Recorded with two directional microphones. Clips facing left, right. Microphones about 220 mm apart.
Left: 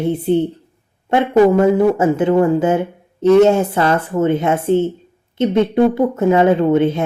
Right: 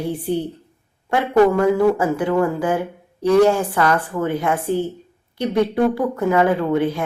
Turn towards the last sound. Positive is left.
turn(degrees=25)  # may be behind; listen again after turning